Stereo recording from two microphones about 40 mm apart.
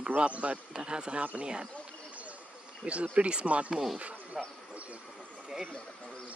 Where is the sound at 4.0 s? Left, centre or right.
Right.